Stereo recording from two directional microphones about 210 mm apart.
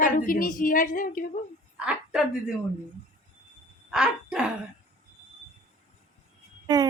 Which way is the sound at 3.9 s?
5° right (ahead or behind).